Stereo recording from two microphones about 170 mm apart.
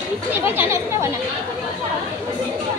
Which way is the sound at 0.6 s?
15° right (ahead or behind).